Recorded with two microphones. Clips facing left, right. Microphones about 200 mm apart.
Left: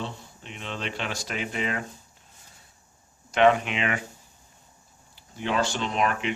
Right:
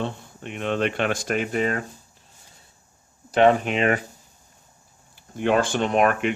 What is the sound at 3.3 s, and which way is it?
Speech, 40° right (ahead or behind).